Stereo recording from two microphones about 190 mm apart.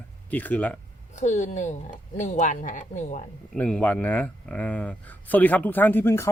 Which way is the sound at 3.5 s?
5° left (ahead or behind).